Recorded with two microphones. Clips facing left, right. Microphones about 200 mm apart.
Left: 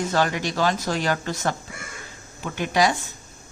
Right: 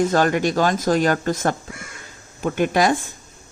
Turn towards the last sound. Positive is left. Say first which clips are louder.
# right 3 dB
turn(degrees=-50)  # may be behind; listen again after turning